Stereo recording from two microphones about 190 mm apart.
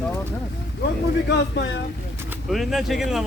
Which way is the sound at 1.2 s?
65° left (ahead or behind).